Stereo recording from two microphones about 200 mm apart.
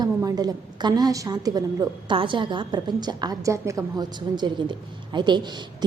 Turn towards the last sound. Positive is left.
turn(degrees=-20)  # may be behind; listen again after turning